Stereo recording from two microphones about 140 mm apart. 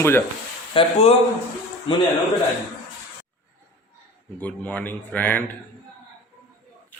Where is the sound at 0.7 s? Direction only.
40° left (ahead or behind).